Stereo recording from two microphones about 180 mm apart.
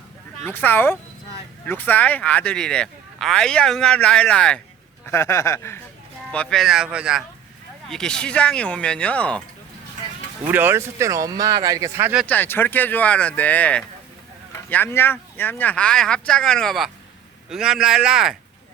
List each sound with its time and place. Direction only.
0.4 s speech: 10° left (ahead or behind)
6.3 s speech: 5° left (ahead or behind)
10.4 s speech: 10° right (ahead or behind)
12.2 s speech: 10° left (ahead or behind)